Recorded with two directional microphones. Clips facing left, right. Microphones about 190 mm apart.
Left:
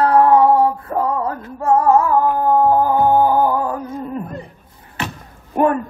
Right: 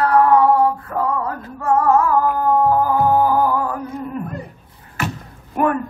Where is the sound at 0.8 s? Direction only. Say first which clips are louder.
Left 2 dB; 30° left (ahead or behind).